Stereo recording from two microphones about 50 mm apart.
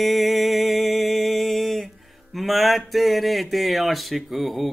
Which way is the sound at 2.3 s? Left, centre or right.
Centre.